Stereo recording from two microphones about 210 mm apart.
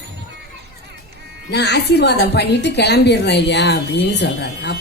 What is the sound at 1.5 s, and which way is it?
A woman's voice, 50° left (ahead or behind).